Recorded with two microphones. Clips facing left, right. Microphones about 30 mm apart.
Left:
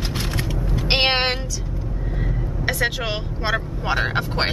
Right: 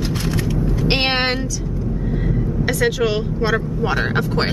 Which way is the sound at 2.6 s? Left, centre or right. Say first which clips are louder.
Right 4 dB; centre.